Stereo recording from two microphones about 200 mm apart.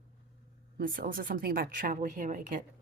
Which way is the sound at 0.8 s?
45° right (ahead or behind).